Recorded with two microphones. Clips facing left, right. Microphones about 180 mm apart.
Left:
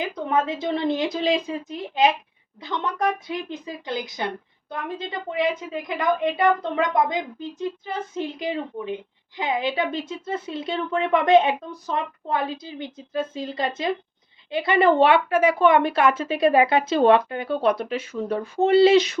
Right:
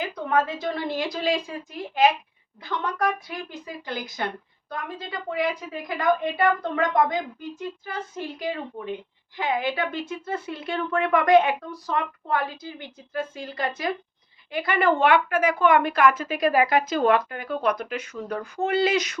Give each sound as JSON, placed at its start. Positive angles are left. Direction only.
{"t": 0.3, "sound": "a woman's voice", "side_deg": 20}